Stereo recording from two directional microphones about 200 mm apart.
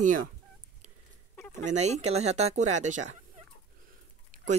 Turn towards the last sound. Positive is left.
turn(degrees=-40)  # may be behind; listen again after turning